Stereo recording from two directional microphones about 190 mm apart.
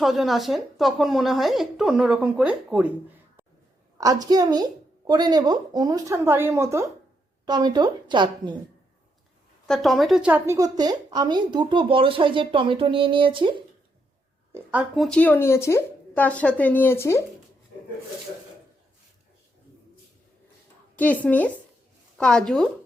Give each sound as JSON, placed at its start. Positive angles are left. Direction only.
{"t": 0.0, "sound": "a woman's voice", "side_deg": 0}
{"t": 3.9, "sound": "a woman's voice", "side_deg": -20}
{"t": 9.6, "sound": "a woman's voice", "side_deg": 0}
{"t": 14.5, "sound": "speech", "side_deg": -10}
{"t": 20.9, "sound": "a woman's voice", "side_deg": 10}